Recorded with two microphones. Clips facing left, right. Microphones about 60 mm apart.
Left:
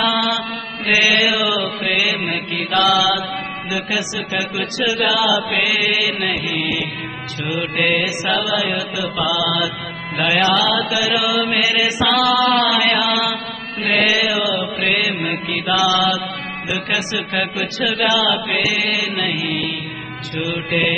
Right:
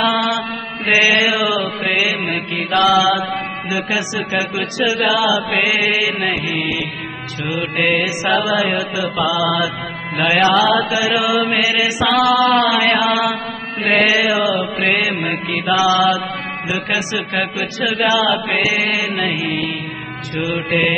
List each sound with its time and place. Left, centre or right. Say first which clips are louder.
0.9 s mantra: right 2 dB; right
3.7 s a man's voice: right 2 dB; right
5.5 s mantra: right 2 dB; right
7.4 s a man's voice: right 1 dB; centre
8.0 s mantra: right 3 dB; right
11.4 s a man's voice: right 1 dB; centre
13.9 s mantra: right 3 dB; right
16.7 s a man's voice: right 1 dB; centre
20.3 s mantra: right 2 dB; centre